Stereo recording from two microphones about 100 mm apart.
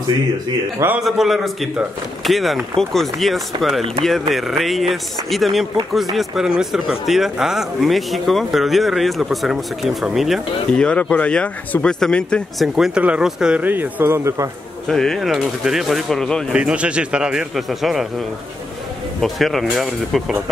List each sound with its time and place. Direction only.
0.9 s speech: 5° right (ahead or behind)
10.7 s speech: 10° left (ahead or behind)
12.7 s speech: 5° right (ahead or behind)
13.7 s speech: 20° right (ahead or behind)
14.9 s speech: 5° left (ahead or behind)
16.5 s speech: 10° right (ahead or behind)
19.2 s speech: centre (ahead or behind)